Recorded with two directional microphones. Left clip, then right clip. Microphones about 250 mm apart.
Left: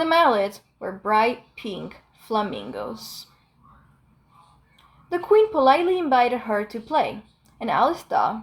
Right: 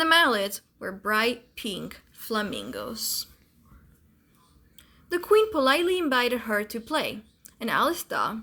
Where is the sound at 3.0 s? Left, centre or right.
Centre.